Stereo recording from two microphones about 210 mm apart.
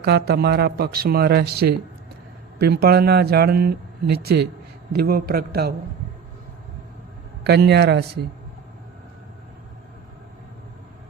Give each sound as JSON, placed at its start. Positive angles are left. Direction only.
{"t": 0.0, "sound": "speech", "side_deg": -50}
{"t": 7.4, "sound": "speech", "side_deg": -50}